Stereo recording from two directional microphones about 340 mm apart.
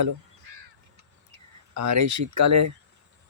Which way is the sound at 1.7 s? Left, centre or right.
Right.